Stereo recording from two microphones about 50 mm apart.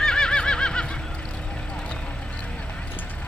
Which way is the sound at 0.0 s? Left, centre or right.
Centre.